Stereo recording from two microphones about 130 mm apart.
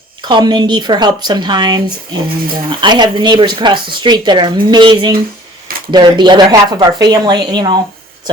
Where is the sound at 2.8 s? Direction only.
35° right (ahead or behind).